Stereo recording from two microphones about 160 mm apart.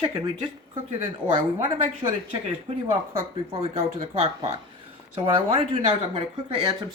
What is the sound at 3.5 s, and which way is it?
Speech, 35° right (ahead or behind).